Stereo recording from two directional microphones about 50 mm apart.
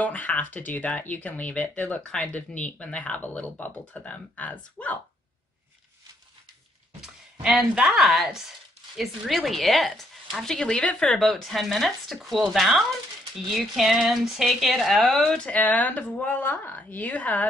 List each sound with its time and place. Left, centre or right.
0.0 s speech: left
3.2 s speech: left
7.0 s speech: centre; by 11.1 s left
11.1 s speech: centre
13.5 s a sound: centre
14.3 s speech: centre
15.0 s speech: centre
15.6 s speech: left